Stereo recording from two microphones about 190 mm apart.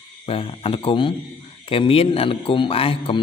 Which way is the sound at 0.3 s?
30° left (ahead or behind).